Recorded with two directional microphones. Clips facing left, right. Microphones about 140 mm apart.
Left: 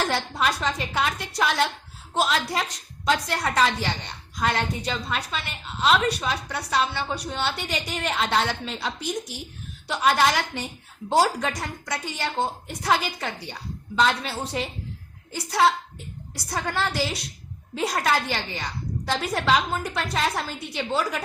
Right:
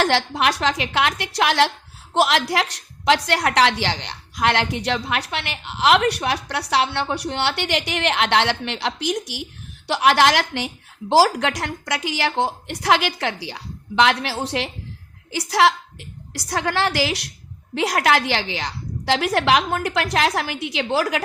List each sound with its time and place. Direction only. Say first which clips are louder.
0.0 s a woman's voice: right 5 dB; 85° right
15.3 s a woman's voice: right 3 dB; 90° right